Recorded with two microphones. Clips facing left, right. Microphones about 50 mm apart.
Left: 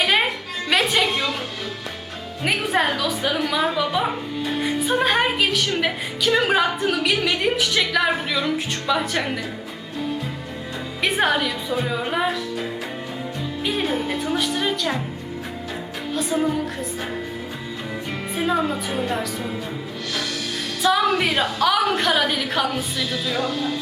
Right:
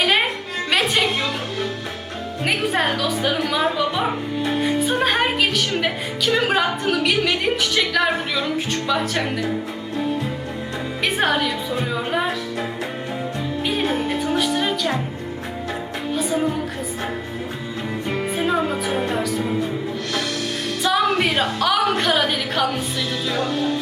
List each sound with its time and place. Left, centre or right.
0.7 s music: centre
2.4 s a woman's voice: centre
11.0 s a woman's voice: centre
13.7 s a woman's voice: centre
16.1 s a woman's voice: centre
18.3 s speech: centre
18.9 s music: right
20.8 s a woman's voice: centre
23.3 s music: right